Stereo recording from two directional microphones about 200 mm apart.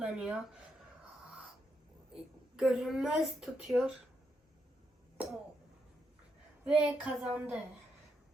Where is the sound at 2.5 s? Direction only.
Centre (ahead or behind).